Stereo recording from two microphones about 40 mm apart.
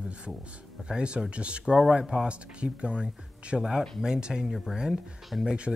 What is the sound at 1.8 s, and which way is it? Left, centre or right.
Speech, centre.